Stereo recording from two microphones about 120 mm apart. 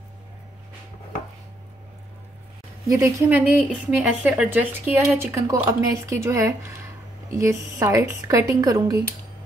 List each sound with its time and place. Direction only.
2.9 s speech: 25° right (ahead or behind)
3.3 s a woman's voice: 15° right (ahead or behind); by 9.0 s 30° right (ahead or behind)